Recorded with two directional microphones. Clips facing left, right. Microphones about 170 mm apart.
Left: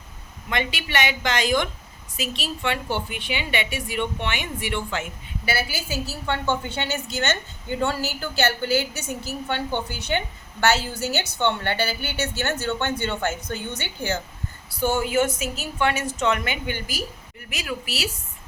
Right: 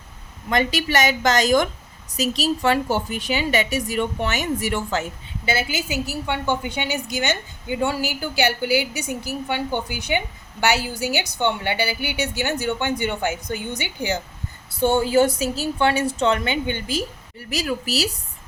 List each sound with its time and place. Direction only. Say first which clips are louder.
0.5 s a woman's voice: right 5 dB; 40° right (ahead or behind)
5.5 s a woman's voice: right 3 dB; 20° right (ahead or behind)
14.7 s a woman's voice: right 4 dB; 25° right (ahead or behind)
17.5 s a woman's voice: right 6 dB; 40° right (ahead or behind)